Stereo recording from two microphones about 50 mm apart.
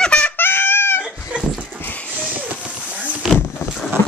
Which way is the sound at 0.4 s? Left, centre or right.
Left.